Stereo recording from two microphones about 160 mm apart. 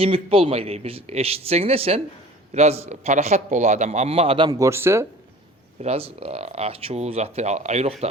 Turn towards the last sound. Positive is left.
turn(degrees=-40)  # may be behind; listen again after turning